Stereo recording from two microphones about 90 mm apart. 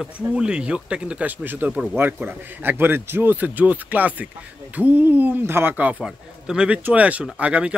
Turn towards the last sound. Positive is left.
turn(degrees=-15)  # may be behind; listen again after turning